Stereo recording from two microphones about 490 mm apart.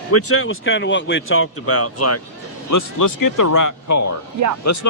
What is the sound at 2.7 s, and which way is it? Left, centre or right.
Speech, left.